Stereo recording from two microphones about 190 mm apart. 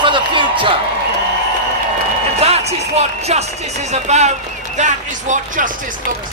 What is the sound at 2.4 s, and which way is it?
Speech, 35° right (ahead or behind).